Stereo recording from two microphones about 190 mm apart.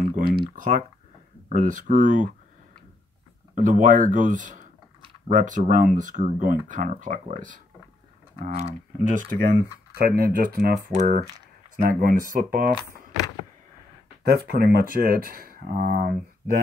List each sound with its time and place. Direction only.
0.1 s typing: 50° right (ahead or behind)
1.5 s speech: 45° right (ahead or behind)
3.5 s speech: 40° right (ahead or behind)
10.9 s speech: 40° right (ahead or behind)
12.8 s speech: 15° left (ahead or behind)
14.2 s speech: 55° right (ahead or behind)